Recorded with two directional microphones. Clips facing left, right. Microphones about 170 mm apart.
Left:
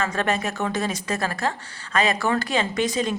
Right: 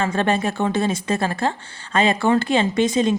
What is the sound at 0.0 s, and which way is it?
A woman's voice, 30° right (ahead or behind).